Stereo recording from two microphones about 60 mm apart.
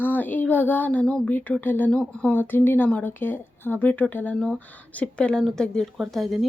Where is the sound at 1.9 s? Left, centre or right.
Centre.